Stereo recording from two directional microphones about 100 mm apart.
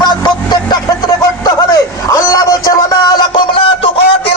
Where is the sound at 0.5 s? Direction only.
40° left (ahead or behind).